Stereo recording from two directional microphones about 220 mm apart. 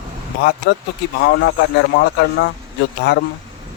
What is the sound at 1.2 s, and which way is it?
Speech, 50° left (ahead or behind).